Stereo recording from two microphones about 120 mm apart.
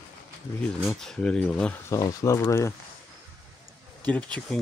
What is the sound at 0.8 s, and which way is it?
Speech, 5° left (ahead or behind).